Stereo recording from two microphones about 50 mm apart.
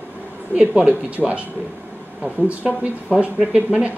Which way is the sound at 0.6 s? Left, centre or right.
Right.